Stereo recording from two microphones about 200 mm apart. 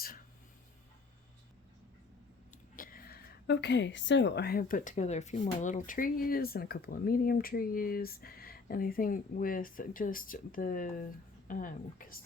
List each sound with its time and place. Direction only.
2.7 s a woman's voice: 45° left (ahead or behind)